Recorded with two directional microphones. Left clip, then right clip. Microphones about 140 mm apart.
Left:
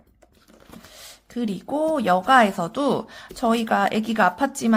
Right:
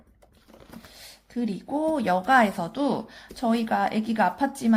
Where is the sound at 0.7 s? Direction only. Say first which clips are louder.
Left 3 dB; 40° left (ahead or behind).